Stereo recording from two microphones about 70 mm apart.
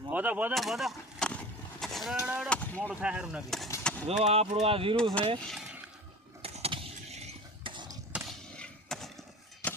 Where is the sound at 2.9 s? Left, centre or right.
Centre.